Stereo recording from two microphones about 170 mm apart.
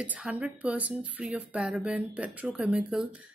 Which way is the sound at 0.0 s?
10° right (ahead or behind).